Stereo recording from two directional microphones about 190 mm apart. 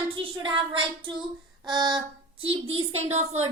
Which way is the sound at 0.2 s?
25° right (ahead or behind).